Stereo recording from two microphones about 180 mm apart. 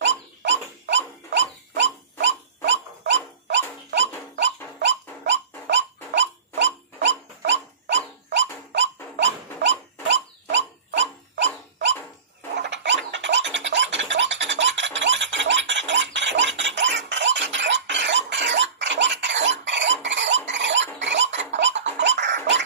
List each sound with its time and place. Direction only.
0.0 s dog: 85° right
1.8 s pig: 85° right
8.7 s dog: 85° right
12.5 s scratching: 85° right